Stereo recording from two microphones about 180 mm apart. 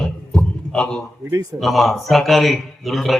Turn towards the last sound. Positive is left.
turn(degrees=0)  # may be behind; listen again after turning